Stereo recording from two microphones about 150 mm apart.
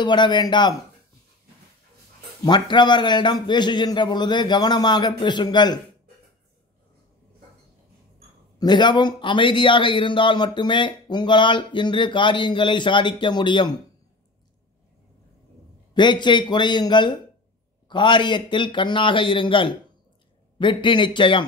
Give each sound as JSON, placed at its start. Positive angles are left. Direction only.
{"t": 0.0, "sound": "a man's voice", "side_deg": 30}
{"t": 2.4, "sound": "a man's voice", "side_deg": 30}
{"t": 8.5, "sound": "a man's voice", "side_deg": 30}
{"t": 15.9, "sound": "a man's voice", "side_deg": 30}